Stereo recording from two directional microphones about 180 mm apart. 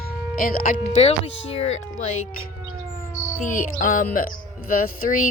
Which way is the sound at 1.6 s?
90° left.